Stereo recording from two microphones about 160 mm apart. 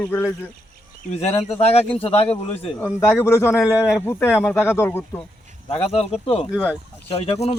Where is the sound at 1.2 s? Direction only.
40° left (ahead or behind).